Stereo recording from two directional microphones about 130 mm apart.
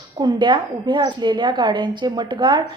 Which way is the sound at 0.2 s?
35° right (ahead or behind).